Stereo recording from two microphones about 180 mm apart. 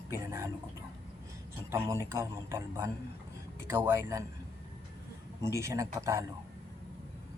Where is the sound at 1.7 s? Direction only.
15° right (ahead or behind).